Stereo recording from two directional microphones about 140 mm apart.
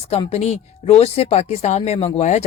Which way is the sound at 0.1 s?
45° left (ahead or behind).